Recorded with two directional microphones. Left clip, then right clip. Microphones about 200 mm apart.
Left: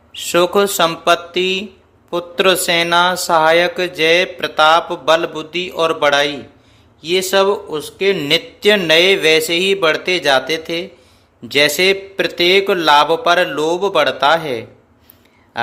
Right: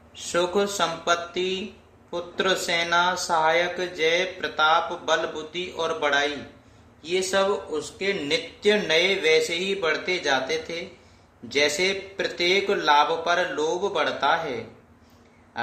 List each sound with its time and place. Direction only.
0.1 s speech: 55° left (ahead or behind)